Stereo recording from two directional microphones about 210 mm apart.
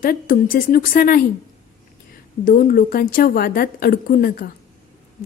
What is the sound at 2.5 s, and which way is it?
A woman's voice, 40° left (ahead or behind).